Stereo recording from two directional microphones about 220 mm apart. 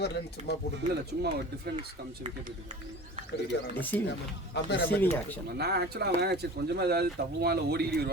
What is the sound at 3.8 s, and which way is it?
Speech, 10° left (ahead or behind).